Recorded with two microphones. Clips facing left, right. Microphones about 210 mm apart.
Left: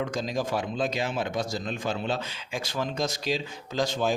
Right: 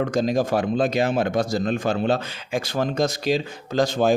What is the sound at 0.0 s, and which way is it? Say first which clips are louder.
Speech: right 8 dB; 55° right (ahead or behind).